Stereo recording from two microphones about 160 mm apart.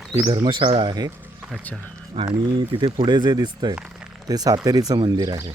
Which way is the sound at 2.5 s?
30° right (ahead or behind).